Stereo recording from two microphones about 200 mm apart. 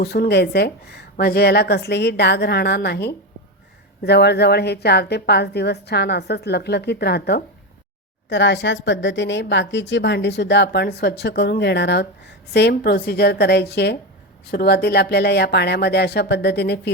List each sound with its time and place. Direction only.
0.0 s a woman's voice: 50° left (ahead or behind)